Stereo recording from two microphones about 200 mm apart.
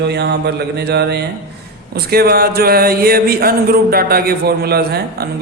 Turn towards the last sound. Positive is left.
turn(degrees=-55)  # may be behind; listen again after turning